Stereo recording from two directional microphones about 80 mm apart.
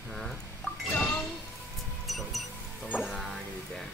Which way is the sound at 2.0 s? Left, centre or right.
Centre.